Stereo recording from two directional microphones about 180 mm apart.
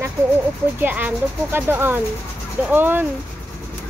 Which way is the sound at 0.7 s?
10° right (ahead or behind).